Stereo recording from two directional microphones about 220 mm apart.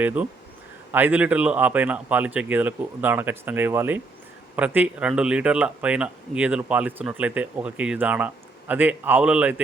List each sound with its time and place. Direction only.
0.0 s speech: 5° right (ahead or behind)